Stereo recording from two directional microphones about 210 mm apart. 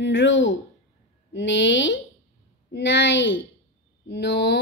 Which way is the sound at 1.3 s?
60° left (ahead or behind).